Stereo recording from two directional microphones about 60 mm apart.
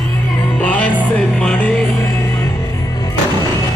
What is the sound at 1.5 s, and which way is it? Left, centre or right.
Music, left.